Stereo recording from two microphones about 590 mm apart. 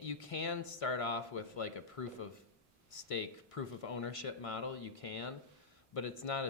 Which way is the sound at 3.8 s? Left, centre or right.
Left.